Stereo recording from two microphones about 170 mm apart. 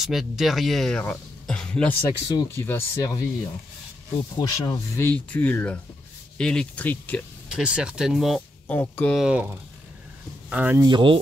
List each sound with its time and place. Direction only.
0.0 s speech: centre (ahead or behind); by 3.3 s 20° left (ahead or behind)
4.4 s speech: 25° left (ahead or behind)
5.0 s speech: 10° left (ahead or behind)
7.4 s speech: 5° right (ahead or behind)
8.6 s speech: 10° left (ahead or behind)
9.2 s speech: 5° right (ahead or behind)
10.5 s speech: 10° right (ahead or behind)
10.8 s speech: 25° right (ahead or behind)